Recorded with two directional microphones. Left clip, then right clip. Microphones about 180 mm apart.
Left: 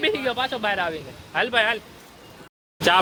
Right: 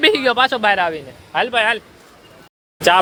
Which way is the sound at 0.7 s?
25° right (ahead or behind).